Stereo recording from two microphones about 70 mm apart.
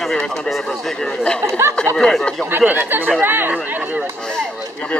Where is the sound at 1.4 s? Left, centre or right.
Right.